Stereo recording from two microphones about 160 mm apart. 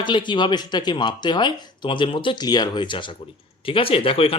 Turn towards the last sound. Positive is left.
turn(degrees=35)  # may be behind; listen again after turning